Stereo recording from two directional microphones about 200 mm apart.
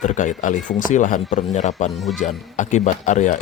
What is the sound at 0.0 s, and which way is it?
Speech, 35° left (ahead or behind).